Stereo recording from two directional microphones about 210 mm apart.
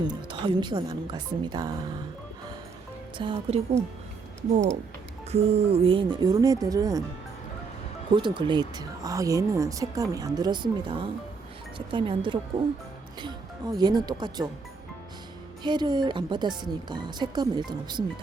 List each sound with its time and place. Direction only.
0.3 s speech: 20° right (ahead or behind)
3.2 s speech: 25° right (ahead or behind)
5.3 s speech: 30° right (ahead or behind)
8.1 s speech: 20° right (ahead or behind)
15.6 s speech: 20° right (ahead or behind)